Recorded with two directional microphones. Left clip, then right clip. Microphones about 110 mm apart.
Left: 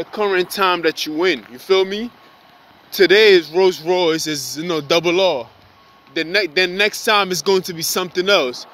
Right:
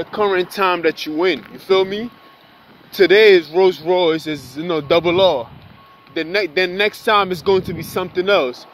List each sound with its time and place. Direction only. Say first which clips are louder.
0.0 s speech: right 1 dB; 20° left (ahead or behind)
6.3 s speech: left 1 dB; 35° left (ahead or behind)